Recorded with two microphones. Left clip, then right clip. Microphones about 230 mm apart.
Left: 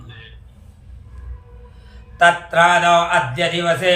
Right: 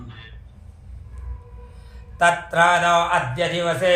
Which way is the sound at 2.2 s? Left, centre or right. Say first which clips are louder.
Left 4 dB; right.